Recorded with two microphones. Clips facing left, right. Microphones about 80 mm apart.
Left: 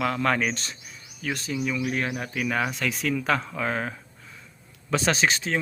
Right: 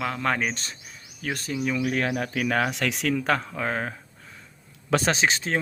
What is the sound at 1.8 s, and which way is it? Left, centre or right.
Speech, right.